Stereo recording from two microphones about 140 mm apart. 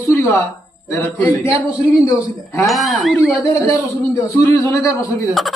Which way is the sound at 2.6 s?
Centre (ahead or behind).